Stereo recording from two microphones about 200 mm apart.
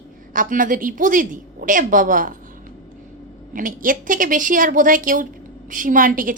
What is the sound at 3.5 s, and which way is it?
A woman's voice, 40° right (ahead or behind).